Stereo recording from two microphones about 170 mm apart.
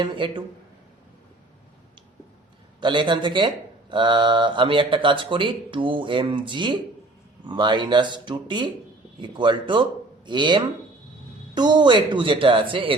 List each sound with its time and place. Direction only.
0.0 s speech: 30° right (ahead or behind)
2.8 s speech: 30° right (ahead or behind)